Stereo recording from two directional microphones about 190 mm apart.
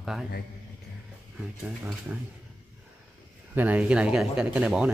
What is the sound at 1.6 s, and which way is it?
Speech, 5° right (ahead or behind).